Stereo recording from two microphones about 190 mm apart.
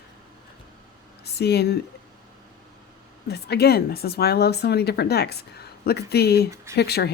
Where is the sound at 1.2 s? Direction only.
60° left (ahead or behind).